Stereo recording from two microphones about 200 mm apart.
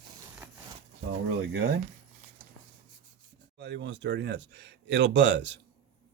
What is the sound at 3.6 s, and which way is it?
Speech, 60° right (ahead or behind).